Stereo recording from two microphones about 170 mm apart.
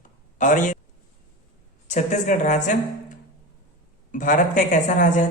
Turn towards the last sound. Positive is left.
turn(degrees=50)  # may be behind; listen again after turning